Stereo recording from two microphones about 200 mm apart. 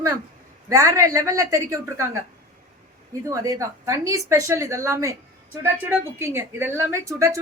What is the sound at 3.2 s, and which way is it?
Speech, 15° right (ahead or behind).